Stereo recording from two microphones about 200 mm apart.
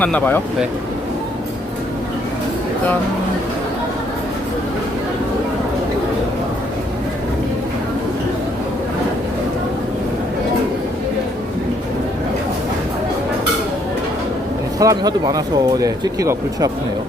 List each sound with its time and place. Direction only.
0.0 s speech: 10° left (ahead or behind)
14.8 s speech: 15° right (ahead or behind)